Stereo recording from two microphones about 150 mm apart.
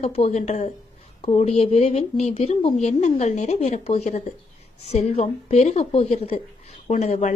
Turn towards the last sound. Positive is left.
turn(degrees=50)  # may be behind; listen again after turning